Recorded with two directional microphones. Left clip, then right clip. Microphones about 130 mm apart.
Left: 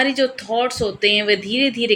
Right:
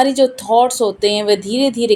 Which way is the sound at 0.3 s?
45° right (ahead or behind).